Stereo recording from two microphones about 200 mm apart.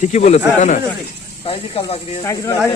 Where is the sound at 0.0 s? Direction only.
35° left (ahead or behind).